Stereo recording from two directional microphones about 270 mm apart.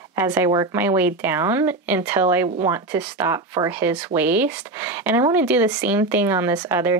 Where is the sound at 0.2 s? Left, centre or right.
Centre.